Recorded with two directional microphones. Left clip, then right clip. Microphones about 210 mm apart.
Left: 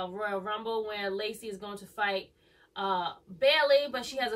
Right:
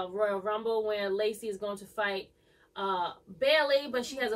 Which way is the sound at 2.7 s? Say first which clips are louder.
Left 1 dB; 5° right (ahead or behind).